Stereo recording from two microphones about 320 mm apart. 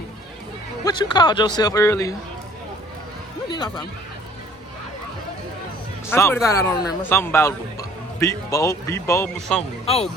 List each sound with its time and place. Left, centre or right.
0.9 s speech: centre
3.5 s speech: centre
6.1 s speech: centre
9.6 s speech: centre